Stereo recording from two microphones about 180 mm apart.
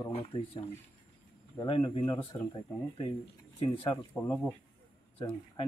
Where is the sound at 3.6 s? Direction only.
30° left (ahead or behind).